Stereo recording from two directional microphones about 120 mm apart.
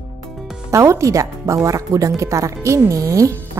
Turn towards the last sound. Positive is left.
turn(degrees=-30)  # may be behind; listen again after turning